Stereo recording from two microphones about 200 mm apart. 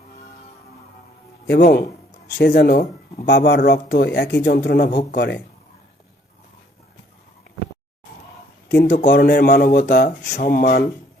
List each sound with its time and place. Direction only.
1.5 s speech: 50° left (ahead or behind)
8.7 s speech: 50° left (ahead or behind)